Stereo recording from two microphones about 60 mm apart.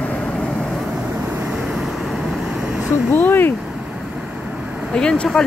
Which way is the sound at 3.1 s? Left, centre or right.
Left.